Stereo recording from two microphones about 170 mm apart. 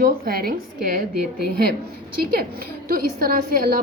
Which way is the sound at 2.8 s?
60° right (ahead or behind).